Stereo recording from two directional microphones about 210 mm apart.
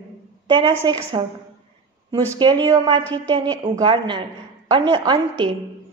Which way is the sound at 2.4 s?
20° right (ahead or behind).